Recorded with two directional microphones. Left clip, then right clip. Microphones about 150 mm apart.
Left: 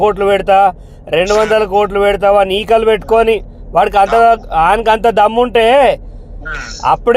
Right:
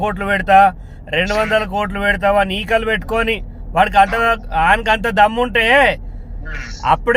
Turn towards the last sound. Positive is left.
turn(degrees=35)  # may be behind; listen again after turning